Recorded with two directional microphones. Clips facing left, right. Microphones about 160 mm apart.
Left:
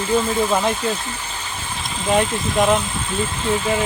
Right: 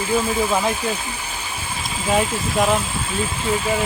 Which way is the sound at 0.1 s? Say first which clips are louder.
Left 2 dB; 5° right (ahead or behind).